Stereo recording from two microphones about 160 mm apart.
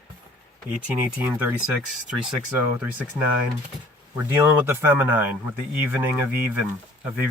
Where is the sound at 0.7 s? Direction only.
5° right (ahead or behind).